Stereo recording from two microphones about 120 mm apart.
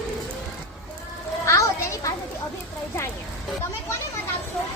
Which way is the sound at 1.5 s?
25° left (ahead or behind).